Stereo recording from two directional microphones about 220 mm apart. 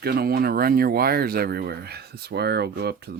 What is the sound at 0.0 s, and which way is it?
Speech, 45° right (ahead or behind).